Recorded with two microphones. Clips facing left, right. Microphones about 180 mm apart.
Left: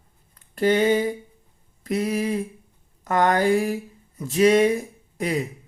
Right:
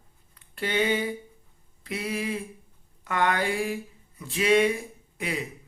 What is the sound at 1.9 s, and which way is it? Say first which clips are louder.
Speech: left 7 dB; 40° left (ahead or behind).